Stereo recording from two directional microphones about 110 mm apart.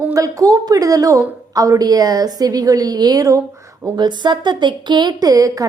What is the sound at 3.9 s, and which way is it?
A woman's voice, 40° right (ahead or behind).